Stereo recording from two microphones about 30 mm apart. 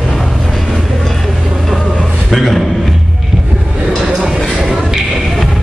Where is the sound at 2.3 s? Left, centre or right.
Centre.